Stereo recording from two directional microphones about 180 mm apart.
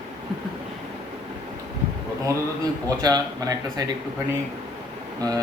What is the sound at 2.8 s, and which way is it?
Speech, 20° right (ahead or behind).